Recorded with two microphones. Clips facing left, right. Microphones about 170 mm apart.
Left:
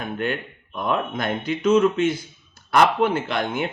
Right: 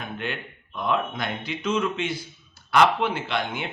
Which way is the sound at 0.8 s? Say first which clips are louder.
Left 2 dB; 50° left (ahead or behind).